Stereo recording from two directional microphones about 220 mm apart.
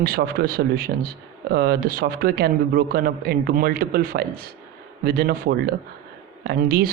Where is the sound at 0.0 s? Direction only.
45° right (ahead or behind).